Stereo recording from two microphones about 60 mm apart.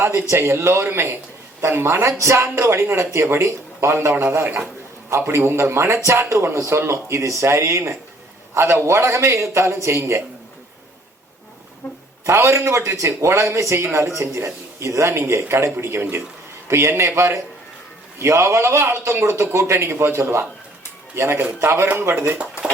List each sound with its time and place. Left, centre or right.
0.0 s a man's voice: right
12.2 s a man's voice: right